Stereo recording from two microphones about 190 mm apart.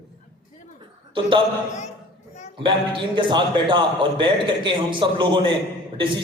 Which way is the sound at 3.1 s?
25° right (ahead or behind).